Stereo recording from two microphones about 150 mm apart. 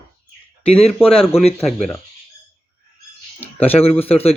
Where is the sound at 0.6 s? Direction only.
40° left (ahead or behind).